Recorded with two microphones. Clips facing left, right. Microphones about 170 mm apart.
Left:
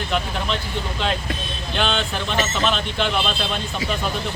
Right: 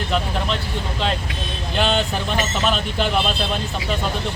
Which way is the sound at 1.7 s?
5° right (ahead or behind).